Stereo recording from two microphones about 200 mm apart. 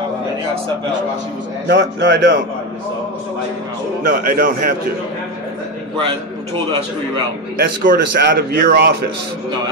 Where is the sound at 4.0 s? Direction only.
45° right (ahead or behind).